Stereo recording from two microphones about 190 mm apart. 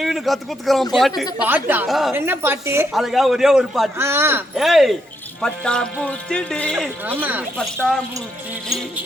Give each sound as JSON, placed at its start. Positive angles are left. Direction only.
{"t": 0.0, "sound": "speech", "side_deg": 0}
{"t": 2.1, "sound": "speech", "side_deg": -10}
{"t": 2.9, "sound": "speech", "side_deg": 0}
{"t": 3.9, "sound": "speech", "side_deg": -15}
{"t": 7.0, "sound": "speech", "side_deg": -10}